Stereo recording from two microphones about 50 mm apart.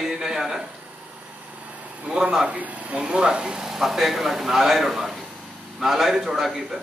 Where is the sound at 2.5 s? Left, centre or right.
Right.